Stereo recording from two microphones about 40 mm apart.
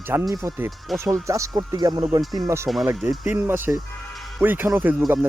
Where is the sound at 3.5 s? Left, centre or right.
Right.